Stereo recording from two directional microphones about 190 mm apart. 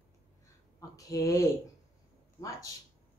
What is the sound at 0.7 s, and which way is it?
Speech, 20° left (ahead or behind).